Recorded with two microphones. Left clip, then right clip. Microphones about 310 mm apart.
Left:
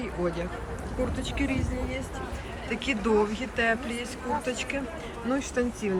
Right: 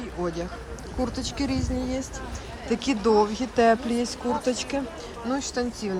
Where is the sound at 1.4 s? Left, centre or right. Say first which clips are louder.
Right 1 dB; centre.